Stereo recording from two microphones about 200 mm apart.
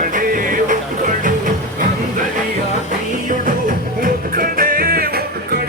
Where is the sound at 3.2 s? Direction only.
45° right (ahead or behind).